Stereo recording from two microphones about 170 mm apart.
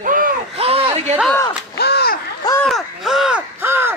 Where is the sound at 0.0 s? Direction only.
55° right (ahead or behind).